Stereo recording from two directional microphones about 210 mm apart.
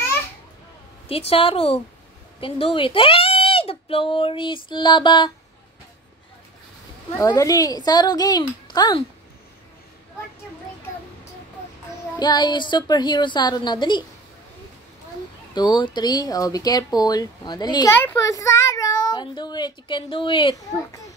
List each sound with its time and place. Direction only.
1.3 s speech: 25° left (ahead or behind)
7.2 s speech: 15° left (ahead or behind)
12.2 s speech: 20° left (ahead or behind)
15.5 s speech: 20° left (ahead or behind)